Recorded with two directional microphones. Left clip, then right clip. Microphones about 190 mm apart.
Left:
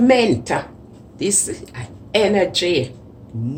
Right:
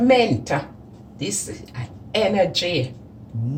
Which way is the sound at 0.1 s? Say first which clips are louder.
Left 2 dB; 50° left (ahead or behind).